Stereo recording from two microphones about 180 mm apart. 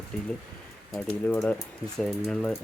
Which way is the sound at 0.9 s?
5° left (ahead or behind).